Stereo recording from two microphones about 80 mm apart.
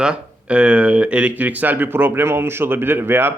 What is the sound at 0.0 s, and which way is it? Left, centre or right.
Speech, centre.